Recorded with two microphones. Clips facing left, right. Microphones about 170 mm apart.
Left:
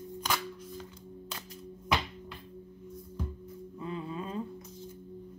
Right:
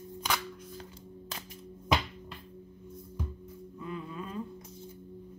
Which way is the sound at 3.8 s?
30° left (ahead or behind).